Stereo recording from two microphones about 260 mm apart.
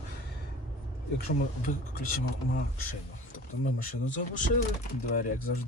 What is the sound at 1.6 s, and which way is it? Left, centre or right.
Speech, left.